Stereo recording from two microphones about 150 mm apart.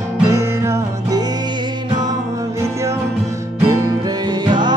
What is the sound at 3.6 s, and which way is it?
Music, 25° right (ahead or behind).